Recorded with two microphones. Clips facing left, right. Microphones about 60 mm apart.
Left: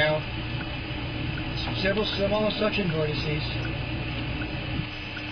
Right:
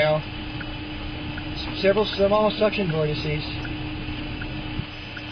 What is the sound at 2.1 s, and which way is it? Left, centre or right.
Speech, right.